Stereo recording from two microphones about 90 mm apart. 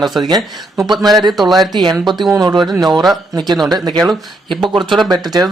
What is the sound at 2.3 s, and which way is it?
Speech, 40° right (ahead or behind).